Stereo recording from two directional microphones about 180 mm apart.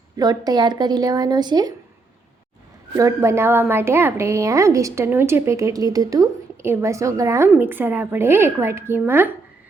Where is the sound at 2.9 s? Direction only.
15° right (ahead or behind).